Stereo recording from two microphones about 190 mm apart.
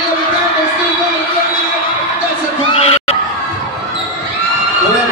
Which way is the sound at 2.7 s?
30° left (ahead or behind).